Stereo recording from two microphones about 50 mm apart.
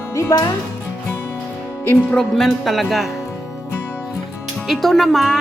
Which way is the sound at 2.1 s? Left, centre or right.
Centre.